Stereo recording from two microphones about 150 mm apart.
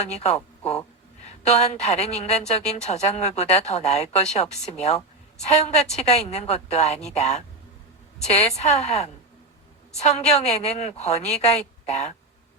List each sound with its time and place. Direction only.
0.1 s a woman's voice: 45° left (ahead or behind)